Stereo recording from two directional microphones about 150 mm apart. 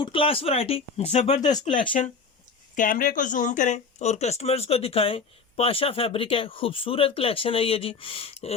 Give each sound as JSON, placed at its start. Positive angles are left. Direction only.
{"t": 0.0, "sound": "speech", "side_deg": 35}
{"t": 1.5, "sound": "speech", "side_deg": 30}
{"t": 2.7, "sound": "speech", "side_deg": 60}